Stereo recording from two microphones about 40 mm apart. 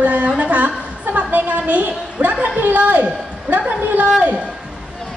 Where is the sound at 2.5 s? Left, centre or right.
Right.